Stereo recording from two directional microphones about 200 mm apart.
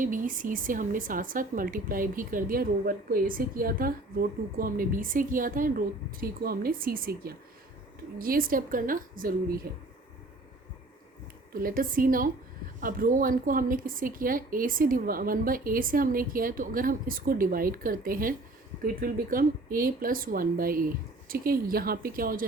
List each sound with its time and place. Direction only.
0.0 s a woman's voice: 40° right (ahead or behind)
11.5 s a woman's voice: 45° right (ahead or behind)